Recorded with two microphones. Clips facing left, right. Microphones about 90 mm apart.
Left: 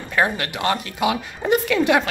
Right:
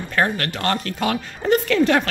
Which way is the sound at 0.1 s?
10° left (ahead or behind).